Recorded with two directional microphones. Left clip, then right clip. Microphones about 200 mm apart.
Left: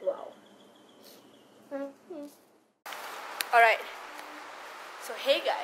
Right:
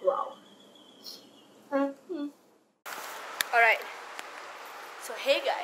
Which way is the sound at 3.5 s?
25° left (ahead or behind).